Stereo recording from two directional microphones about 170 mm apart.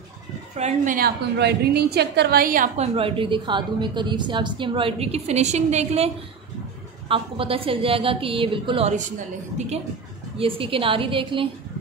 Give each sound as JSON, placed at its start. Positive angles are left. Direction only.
{"t": 0.6, "sound": "a woman's voice", "side_deg": -40}
{"t": 0.9, "sound": "a woman's voice", "side_deg": -65}
{"t": 2.8, "sound": "a woman's voice", "side_deg": -30}
{"t": 10.3, "sound": "a woman's voice", "side_deg": -30}